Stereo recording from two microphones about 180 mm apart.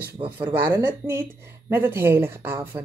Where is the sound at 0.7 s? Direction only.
10° right (ahead or behind).